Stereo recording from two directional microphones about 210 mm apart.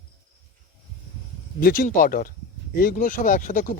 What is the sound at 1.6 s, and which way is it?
Speech, 40° left (ahead or behind).